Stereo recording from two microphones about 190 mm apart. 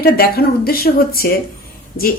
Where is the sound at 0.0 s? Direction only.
55° left (ahead or behind).